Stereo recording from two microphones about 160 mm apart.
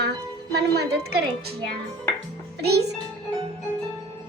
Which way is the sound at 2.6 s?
90° right.